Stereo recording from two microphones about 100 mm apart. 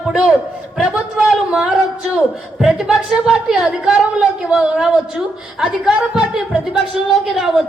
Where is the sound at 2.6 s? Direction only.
5° right (ahead or behind).